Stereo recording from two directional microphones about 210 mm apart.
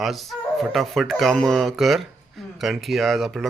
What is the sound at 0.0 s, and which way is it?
Speech, centre (ahead or behind).